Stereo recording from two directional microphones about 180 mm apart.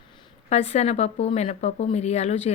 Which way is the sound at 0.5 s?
35° left (ahead or behind).